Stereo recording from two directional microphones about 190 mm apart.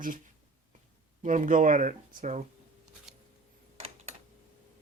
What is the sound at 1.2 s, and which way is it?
Speech, 45° right (ahead or behind).